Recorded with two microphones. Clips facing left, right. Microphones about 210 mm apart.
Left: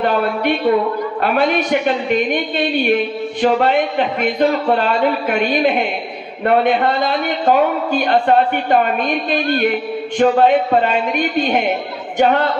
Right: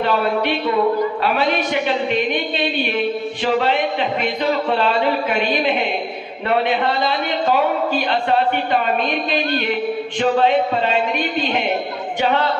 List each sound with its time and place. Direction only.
0.0 s a man's voice: 50° left (ahead or behind)